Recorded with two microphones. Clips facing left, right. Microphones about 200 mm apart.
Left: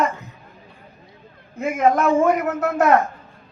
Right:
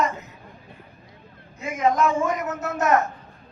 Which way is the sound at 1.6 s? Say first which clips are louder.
Left 3 dB; 55° left (ahead or behind).